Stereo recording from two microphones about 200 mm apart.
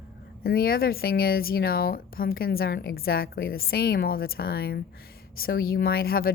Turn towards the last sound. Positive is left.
turn(degrees=50)  # may be behind; listen again after turning